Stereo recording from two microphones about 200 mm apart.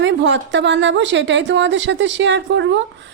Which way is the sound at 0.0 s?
65° right (ahead or behind).